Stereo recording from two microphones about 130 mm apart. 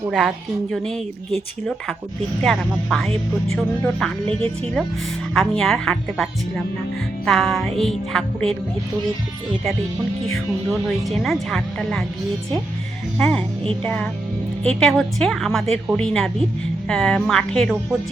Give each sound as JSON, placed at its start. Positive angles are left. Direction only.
{"t": 0.1, "sound": "a woman's voice", "side_deg": 0}
{"t": 4.3, "sound": "speech", "side_deg": -45}
{"t": 5.3, "sound": "a woman's voice", "side_deg": 5}
{"t": 7.3, "sound": "a woman's voice", "side_deg": 0}
{"t": 11.0, "sound": "a woman's voice", "side_deg": 0}
{"t": 13.1, "sound": "a woman's voice", "side_deg": 5}